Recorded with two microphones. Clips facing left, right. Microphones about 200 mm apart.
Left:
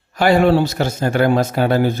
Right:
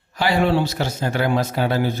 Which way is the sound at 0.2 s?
50° left (ahead or behind).